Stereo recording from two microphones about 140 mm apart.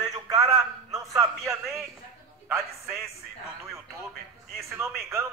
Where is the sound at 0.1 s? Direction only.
25° right (ahead or behind).